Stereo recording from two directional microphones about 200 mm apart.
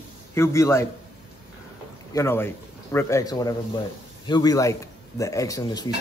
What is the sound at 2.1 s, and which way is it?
Speech, 10° left (ahead or behind).